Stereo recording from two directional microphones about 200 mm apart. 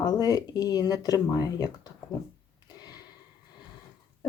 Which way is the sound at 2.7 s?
20° left (ahead or behind).